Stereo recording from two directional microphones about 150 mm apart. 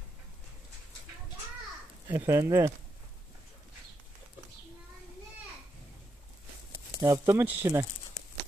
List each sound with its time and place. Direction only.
2.0 s speech: 15° right (ahead or behind)
7.0 s speech: 20° right (ahead or behind)